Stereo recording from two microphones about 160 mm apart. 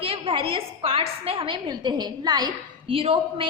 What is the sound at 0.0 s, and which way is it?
A woman's voice, 35° right (ahead or behind).